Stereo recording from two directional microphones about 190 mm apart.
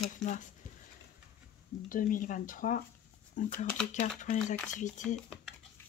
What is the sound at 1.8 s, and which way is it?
Speech, 45° left (ahead or behind).